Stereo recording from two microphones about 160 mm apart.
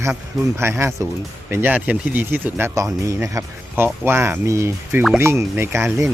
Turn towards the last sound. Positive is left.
turn(degrees=-15)  # may be behind; listen again after turning